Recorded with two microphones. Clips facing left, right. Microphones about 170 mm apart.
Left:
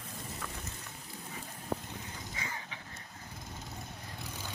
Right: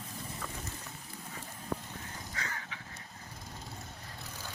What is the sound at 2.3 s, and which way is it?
Fowl, 15° left (ahead or behind).